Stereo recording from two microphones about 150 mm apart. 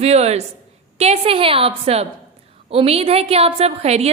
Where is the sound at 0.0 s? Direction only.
45° right (ahead or behind).